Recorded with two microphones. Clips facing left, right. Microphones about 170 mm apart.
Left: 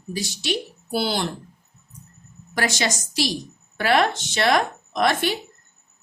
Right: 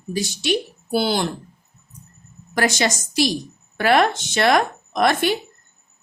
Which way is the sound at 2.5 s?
45° right (ahead or behind).